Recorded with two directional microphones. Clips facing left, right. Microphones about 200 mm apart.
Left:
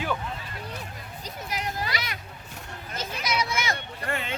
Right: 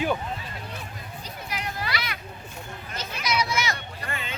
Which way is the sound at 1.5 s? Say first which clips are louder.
Left 1 dB; 40° left (ahead or behind).